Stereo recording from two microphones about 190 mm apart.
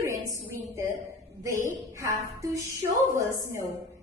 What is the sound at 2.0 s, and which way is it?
A woman's voice, 15° right (ahead or behind).